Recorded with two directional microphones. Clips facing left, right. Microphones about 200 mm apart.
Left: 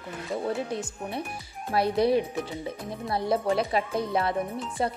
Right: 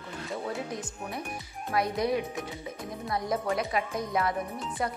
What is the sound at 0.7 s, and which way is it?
Speech, 30° left (ahead or behind).